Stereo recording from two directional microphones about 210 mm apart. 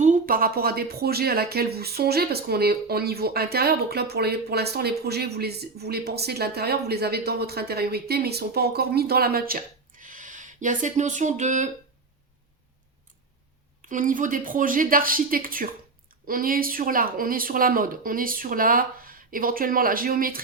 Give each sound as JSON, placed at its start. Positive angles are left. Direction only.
{"t": 0.0, "sound": "a woman's voice", "side_deg": -40}
{"t": 13.8, "sound": "a woman's voice", "side_deg": -40}